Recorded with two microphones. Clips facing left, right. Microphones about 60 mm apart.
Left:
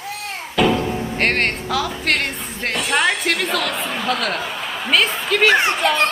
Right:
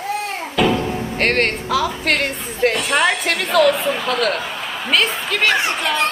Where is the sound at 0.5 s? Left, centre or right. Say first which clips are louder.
Even; centre.